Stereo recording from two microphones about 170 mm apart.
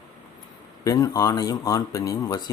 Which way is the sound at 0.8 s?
20° left (ahead or behind).